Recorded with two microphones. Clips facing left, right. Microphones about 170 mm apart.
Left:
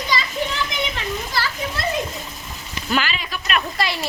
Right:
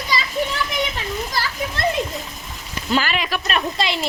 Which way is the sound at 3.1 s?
75° right (ahead or behind).